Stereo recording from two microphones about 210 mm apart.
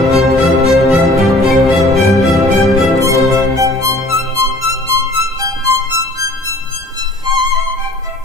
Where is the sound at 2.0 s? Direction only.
Centre (ahead or behind).